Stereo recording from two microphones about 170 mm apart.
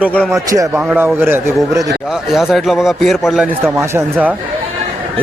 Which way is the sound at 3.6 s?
15° right (ahead or behind).